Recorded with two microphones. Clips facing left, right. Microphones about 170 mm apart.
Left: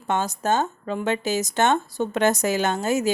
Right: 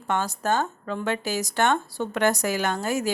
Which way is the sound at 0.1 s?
20° left (ahead or behind).